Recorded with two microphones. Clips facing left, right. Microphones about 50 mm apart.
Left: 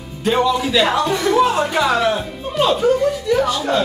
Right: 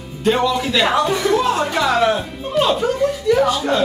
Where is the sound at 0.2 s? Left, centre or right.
Centre.